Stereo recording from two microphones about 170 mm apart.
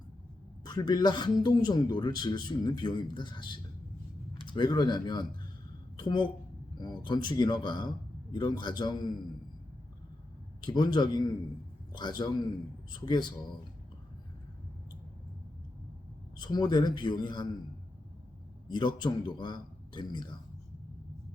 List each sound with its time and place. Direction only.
0.6 s a man's voice: 25° left (ahead or behind)
4.4 s a man's voice: 25° left (ahead or behind)
10.6 s a man's voice: 25° left (ahead or behind)
16.4 s a man's voice: 25° left (ahead or behind)
18.7 s a man's voice: 25° left (ahead or behind)